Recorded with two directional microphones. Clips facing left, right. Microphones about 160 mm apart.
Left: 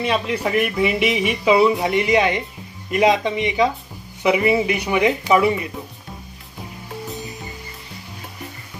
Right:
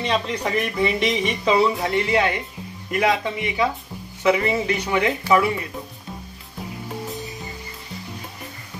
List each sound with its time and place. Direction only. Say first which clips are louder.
0.0 s speech: left 2 dB; 5° left (ahead or behind)